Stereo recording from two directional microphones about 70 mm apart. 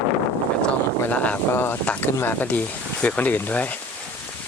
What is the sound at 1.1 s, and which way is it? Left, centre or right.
Speech, left.